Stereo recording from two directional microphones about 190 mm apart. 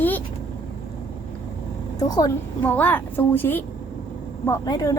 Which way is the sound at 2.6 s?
10° left (ahead or behind).